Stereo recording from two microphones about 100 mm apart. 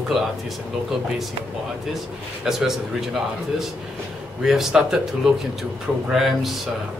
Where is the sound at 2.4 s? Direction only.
5° right (ahead or behind).